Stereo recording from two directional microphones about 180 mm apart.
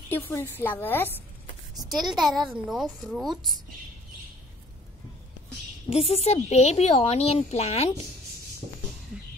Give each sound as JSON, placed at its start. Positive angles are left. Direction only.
{"t": 0.1, "sound": "a woman's voice", "side_deg": 10}
{"t": 1.8, "sound": "a woman's voice", "side_deg": 0}
{"t": 5.9, "sound": "speech", "side_deg": 35}